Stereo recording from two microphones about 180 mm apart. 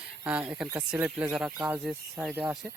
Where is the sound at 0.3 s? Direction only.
5° right (ahead or behind).